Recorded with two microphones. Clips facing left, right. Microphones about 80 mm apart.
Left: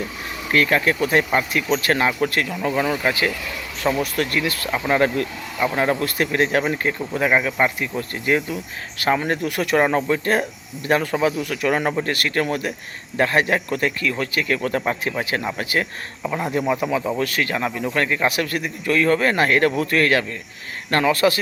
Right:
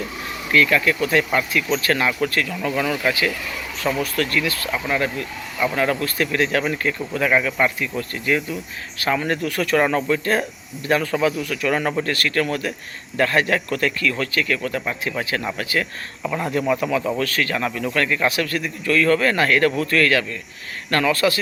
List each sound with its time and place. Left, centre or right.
0.5 s speech: left
5.5 s speech: left